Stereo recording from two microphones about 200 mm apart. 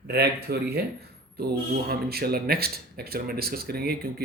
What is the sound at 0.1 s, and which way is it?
Speech, 55° right (ahead or behind).